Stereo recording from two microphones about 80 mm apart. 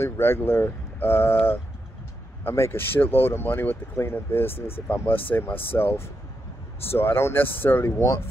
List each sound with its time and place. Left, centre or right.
0.0 s speech: left